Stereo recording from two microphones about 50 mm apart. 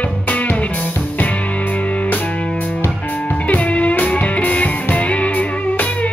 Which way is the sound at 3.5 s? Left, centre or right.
Left.